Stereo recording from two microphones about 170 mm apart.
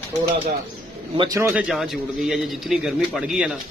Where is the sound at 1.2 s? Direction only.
20° right (ahead or behind).